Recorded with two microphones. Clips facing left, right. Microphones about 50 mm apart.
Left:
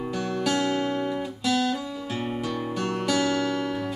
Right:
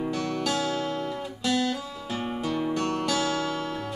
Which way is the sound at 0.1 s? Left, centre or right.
Centre.